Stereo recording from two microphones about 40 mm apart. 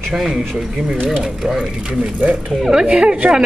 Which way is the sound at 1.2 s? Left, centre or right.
Centre.